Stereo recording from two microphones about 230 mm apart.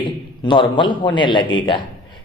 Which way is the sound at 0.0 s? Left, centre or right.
Left.